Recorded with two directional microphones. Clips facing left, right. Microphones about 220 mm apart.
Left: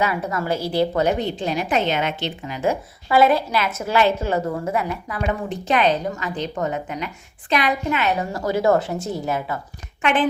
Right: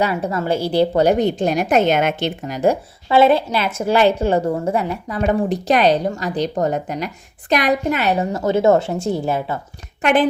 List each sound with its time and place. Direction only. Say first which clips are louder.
0.0 s a woman's voice: right 3 dB; 30° right (ahead or behind)
1.2 s a woman's voice: right 6 dB; 45° right (ahead or behind)
3.1 s a woman's voice: right 3 dB; 25° right (ahead or behind)
10.0 s a woman's voice: right 4 dB; 40° right (ahead or behind)